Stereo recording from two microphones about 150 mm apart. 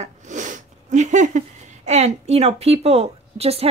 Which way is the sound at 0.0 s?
55° right (ahead or behind).